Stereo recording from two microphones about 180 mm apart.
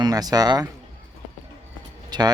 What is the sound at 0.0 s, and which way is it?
Speech, 20° right (ahead or behind).